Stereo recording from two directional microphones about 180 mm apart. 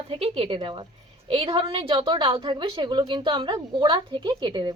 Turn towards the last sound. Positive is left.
turn(degrees=-25)  # may be behind; listen again after turning